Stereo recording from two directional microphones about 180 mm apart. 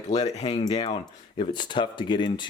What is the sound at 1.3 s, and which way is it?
Speech, 25° left (ahead or behind).